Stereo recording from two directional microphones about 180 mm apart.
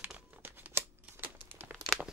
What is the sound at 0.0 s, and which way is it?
Crumpling, 10° right (ahead or behind).